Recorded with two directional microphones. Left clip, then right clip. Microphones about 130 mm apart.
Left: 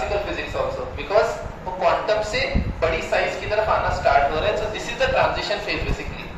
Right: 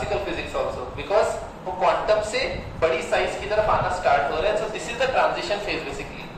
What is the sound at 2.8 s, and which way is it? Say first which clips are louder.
Speech: even; 25° right (ahead or behind).